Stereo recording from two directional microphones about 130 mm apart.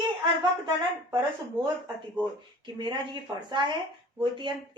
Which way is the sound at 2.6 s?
35° right (ahead or behind).